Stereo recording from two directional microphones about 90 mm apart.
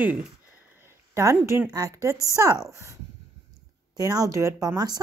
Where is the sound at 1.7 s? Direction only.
40° right (ahead or behind).